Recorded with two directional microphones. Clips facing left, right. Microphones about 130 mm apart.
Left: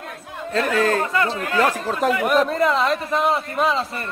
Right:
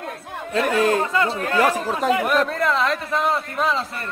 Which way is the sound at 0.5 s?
15° right (ahead or behind).